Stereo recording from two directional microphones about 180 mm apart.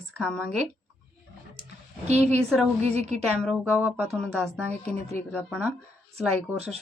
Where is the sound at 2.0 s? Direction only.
40° right (ahead or behind).